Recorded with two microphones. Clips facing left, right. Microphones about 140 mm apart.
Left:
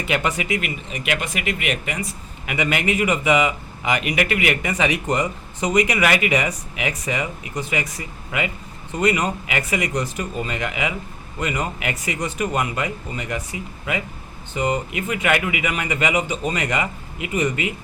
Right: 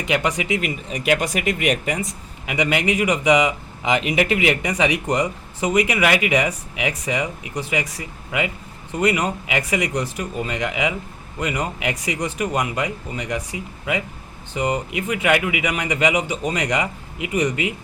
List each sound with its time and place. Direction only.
0.0 s speech: 15° right (ahead or behind)
0.6 s speech: 35° right (ahead or behind)
2.5 s speech: 15° right (ahead or behind)
4.7 s speech: 15° right (ahead or behind)